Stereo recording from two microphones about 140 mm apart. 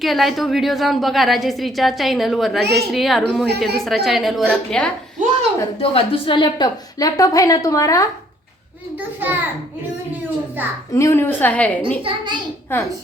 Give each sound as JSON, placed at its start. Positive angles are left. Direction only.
{"t": 0.0, "sound": "a woman's voice", "side_deg": 0}
{"t": 5.8, "sound": "a woman's voice", "side_deg": 40}
{"t": 9.0, "sound": "a child's voice", "side_deg": -15}
{"t": 10.6, "sound": "a child's voice", "side_deg": -15}
{"t": 10.9, "sound": "a woman's voice", "side_deg": 20}
{"t": 12.0, "sound": "a child's voice", "side_deg": -35}